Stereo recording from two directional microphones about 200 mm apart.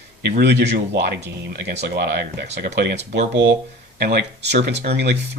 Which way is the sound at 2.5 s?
35° right (ahead or behind).